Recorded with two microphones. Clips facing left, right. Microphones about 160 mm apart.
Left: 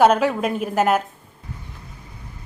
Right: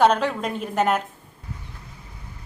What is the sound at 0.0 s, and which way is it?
A woman's voice, 10° left (ahead or behind).